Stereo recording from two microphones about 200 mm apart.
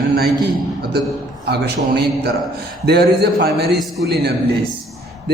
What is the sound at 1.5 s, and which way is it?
A man's voice, 50° right (ahead or behind).